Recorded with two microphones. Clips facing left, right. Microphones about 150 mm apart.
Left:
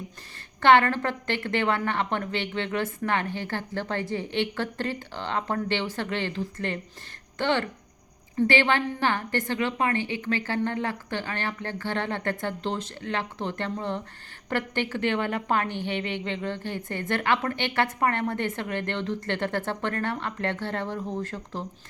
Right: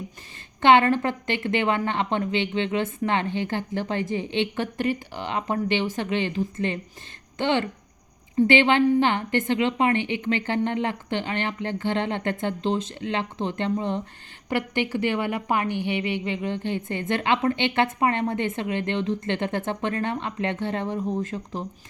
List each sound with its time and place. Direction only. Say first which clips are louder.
0.6 s a woman's voice: right 2 dB; 20° right (ahead or behind)